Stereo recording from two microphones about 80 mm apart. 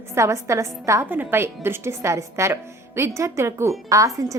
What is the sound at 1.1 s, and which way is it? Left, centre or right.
A woman's voice, right.